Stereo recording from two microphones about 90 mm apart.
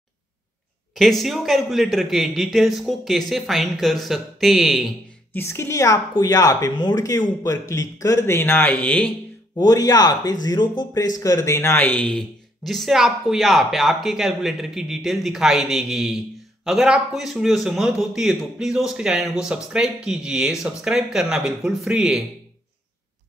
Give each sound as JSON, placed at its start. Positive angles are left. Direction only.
{"t": 0.9, "sound": "a man's voice", "side_deg": 0}
{"t": 5.3, "sound": "a woman's voice", "side_deg": 30}
{"t": 9.6, "sound": "speech", "side_deg": 45}
{"t": 10.9, "sound": "speech", "side_deg": 40}
{"t": 11.8, "sound": "speech", "side_deg": 15}
{"t": 12.6, "sound": "a man's voice", "side_deg": 0}